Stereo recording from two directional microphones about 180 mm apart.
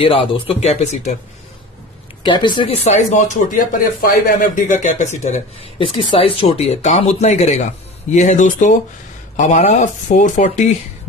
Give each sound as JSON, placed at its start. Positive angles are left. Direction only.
{"t": 0.0, "sound": "speech", "side_deg": 30}
{"t": 2.2, "sound": "speech", "side_deg": 25}